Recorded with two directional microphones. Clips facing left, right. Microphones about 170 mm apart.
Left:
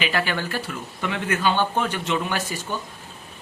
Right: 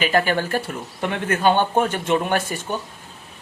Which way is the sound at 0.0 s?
45° right (ahead or behind).